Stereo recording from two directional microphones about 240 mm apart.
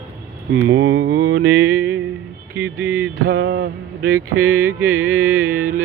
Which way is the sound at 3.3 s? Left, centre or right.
Right.